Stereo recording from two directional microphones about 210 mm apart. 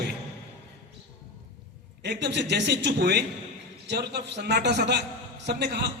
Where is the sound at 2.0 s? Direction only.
55° right (ahead or behind).